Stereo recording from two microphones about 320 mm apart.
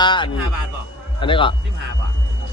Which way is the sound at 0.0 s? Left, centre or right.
Centre.